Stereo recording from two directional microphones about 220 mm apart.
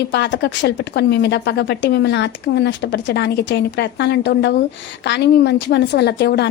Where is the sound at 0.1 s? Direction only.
50° left (ahead or behind).